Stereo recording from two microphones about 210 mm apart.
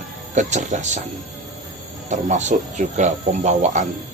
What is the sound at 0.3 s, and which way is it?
Speech, 35° right (ahead or behind).